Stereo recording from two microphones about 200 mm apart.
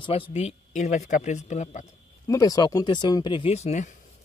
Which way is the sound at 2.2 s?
15° left (ahead or behind).